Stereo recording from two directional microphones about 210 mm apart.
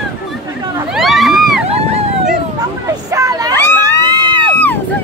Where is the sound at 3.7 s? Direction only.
20° right (ahead or behind).